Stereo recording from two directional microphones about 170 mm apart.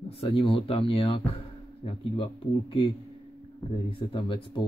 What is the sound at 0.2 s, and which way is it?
Speech, 30° left (ahead or behind).